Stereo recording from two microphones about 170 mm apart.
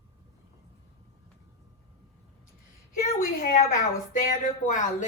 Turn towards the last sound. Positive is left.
turn(degrees=50)  # may be behind; listen again after turning